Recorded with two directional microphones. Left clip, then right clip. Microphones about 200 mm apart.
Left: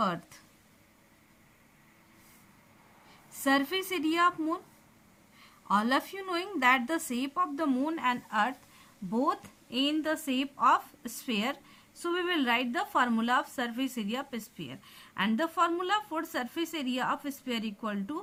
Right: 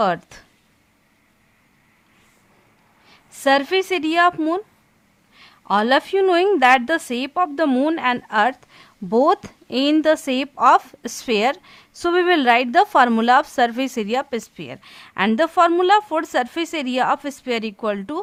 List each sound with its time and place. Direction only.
0.0 s a woman's voice: 45° right (ahead or behind)
3.1 s a woman's voice: 45° right (ahead or behind)